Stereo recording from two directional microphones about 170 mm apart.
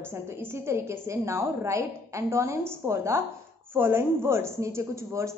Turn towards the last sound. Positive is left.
turn(degrees=-15)  # may be behind; listen again after turning